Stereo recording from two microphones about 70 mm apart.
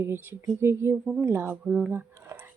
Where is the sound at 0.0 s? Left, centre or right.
Right.